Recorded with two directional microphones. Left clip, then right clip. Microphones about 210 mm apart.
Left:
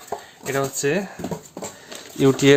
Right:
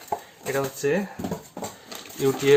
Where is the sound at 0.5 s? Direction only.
50° left (ahead or behind).